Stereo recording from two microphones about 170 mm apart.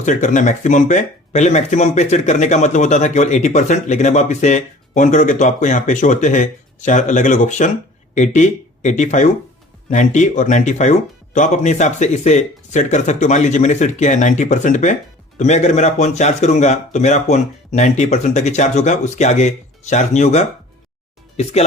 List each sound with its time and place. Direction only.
0.0 s speech: 45° left (ahead or behind)